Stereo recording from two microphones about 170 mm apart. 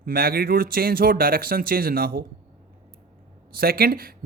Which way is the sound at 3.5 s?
65° right (ahead or behind).